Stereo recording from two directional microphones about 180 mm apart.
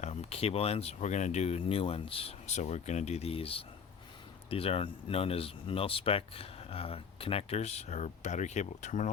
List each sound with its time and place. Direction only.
0.0 s speech: 35° left (ahead or behind)